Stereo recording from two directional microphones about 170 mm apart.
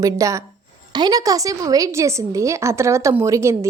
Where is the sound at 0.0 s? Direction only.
20° right (ahead or behind).